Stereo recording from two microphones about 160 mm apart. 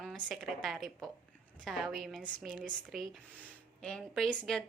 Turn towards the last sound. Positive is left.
turn(degrees=5)  # may be behind; listen again after turning